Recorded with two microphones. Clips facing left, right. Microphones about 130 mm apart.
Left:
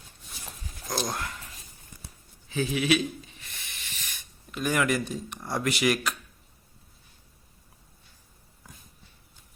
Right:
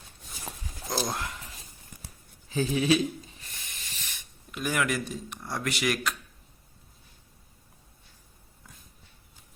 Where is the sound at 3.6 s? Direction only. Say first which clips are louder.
Left 1 dB; 40° right (ahead or behind).